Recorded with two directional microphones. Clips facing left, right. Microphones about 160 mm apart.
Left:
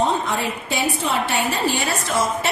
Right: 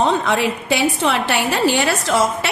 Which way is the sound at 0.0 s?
80° right.